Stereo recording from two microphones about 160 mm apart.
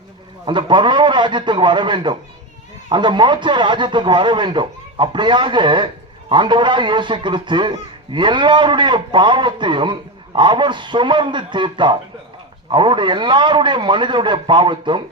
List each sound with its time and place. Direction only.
0.4 s a man's voice: 30° right (ahead or behind)